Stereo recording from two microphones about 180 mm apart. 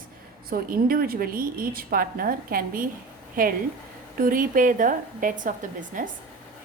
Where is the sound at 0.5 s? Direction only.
55° right (ahead or behind).